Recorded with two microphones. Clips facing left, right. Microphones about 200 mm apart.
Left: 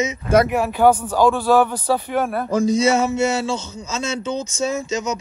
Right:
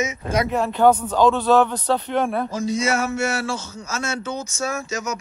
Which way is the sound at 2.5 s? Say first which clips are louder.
Left 6 dB; 45° left (ahead or behind).